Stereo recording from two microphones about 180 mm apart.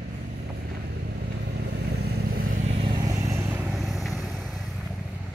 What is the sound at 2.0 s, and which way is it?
Vehicle, 55° right (ahead or behind).